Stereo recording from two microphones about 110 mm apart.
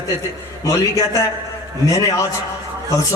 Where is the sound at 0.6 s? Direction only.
30° left (ahead or behind).